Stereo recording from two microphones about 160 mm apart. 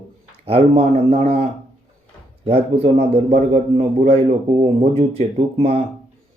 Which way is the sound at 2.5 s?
40° right (ahead or behind).